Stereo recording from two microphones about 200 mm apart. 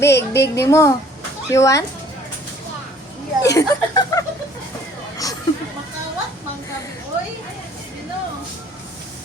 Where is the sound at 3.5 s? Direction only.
15° left (ahead or behind).